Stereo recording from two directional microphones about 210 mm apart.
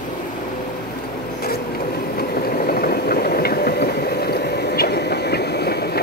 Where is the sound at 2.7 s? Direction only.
45° left (ahead or behind).